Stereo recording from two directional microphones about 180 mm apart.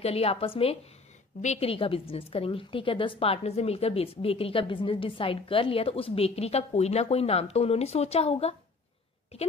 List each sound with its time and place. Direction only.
0.0 s a woman's voice: 35° left (ahead or behind)